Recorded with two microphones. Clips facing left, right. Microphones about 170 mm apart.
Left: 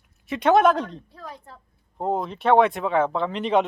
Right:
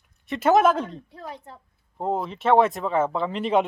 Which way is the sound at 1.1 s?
25° right (ahead or behind).